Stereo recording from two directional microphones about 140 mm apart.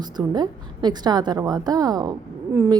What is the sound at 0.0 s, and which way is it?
A woman's voice, 30° right (ahead or behind).